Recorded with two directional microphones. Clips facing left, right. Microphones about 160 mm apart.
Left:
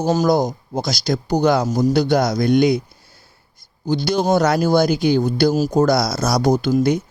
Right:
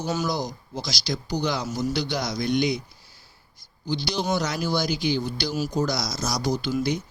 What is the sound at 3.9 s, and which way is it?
Speech, 50° left (ahead or behind).